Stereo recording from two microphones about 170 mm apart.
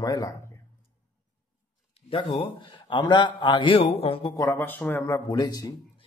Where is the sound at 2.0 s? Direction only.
35° left (ahead or behind).